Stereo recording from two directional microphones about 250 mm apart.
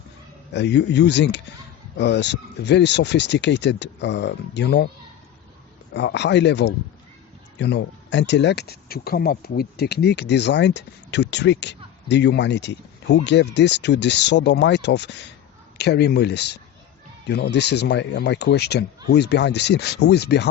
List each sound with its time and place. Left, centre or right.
0.5 s speech: left
5.9 s speech: left